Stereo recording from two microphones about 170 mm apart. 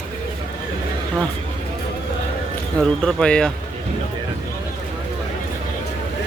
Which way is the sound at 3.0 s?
5° left (ahead or behind).